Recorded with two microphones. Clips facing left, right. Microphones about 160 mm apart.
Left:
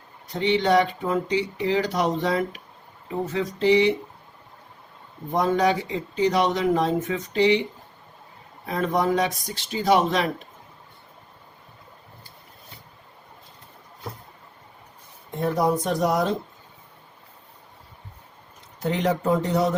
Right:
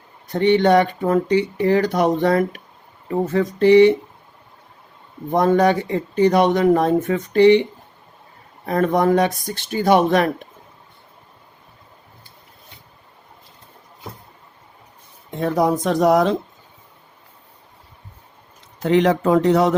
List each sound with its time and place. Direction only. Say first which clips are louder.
0.3 s speech: right 6 dB; 55° right (ahead or behind)
5.3 s speech: right 5 dB; 55° right (ahead or behind)
8.6 s speech: right 6 dB; 55° right (ahead or behind)
15.4 s speech: right 4 dB; 90° right
18.8 s speech: right 8 dB; 90° right